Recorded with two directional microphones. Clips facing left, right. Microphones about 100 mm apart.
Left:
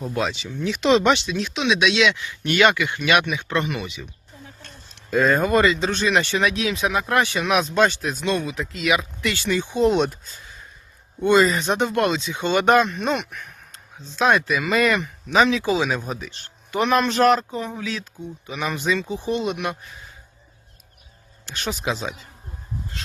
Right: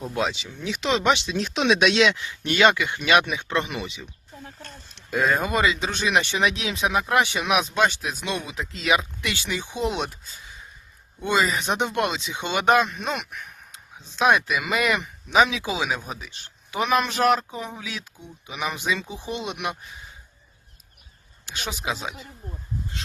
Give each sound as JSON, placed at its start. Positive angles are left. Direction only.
{"t": 0.2, "sound": "speech", "side_deg": -15}
{"t": 0.8, "sound": "speech", "side_deg": 0}
{"t": 1.0, "sound": "speech", "side_deg": -15}
{"t": 1.3, "sound": "speech", "side_deg": -40}
{"t": 5.1, "sound": "speech", "side_deg": -15}
{"t": 9.2, "sound": "speech", "side_deg": -15}
{"t": 11.2, "sound": "speech", "side_deg": -10}
{"t": 21.4, "sound": "speech", "side_deg": -15}